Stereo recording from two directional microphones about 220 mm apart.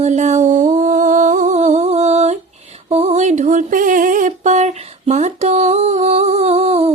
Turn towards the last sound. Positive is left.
turn(degrees=-30)  # may be behind; listen again after turning